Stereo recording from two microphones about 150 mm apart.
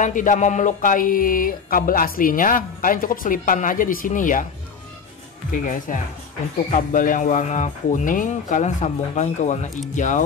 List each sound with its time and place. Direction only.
0.0 s speech: 60° left (ahead or behind)
5.5 s speech: 60° left (ahead or behind)